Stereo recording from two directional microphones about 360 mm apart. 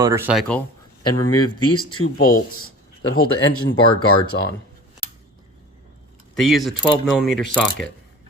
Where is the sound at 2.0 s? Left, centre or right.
Left.